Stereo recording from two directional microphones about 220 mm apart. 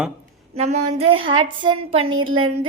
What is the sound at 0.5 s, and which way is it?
A woman's voice, 30° right (ahead or behind).